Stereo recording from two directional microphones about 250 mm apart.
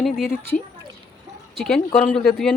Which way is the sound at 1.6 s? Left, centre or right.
Centre.